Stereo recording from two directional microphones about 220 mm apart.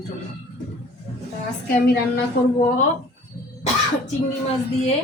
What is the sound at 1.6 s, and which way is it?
Speech, 45° left (ahead or behind).